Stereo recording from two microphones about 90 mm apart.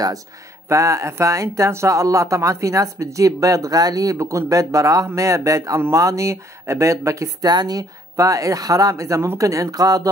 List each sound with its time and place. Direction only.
0.7 s speech: 35° right (ahead or behind)